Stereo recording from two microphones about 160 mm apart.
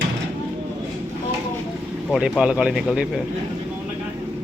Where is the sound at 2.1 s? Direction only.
5° right (ahead or behind).